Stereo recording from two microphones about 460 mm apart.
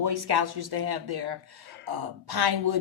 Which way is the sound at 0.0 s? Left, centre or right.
Right.